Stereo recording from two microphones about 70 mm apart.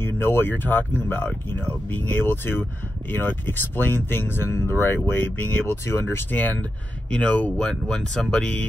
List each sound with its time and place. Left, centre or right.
0.0 s speech: left
6.3 s speech: left